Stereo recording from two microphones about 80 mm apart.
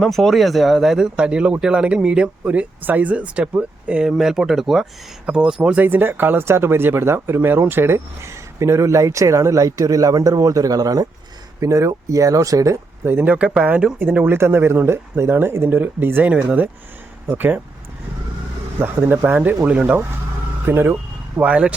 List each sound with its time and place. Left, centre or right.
0.0 s speech: centre; by 12.8 s right
13.1 s speech: right
19.0 s speech: right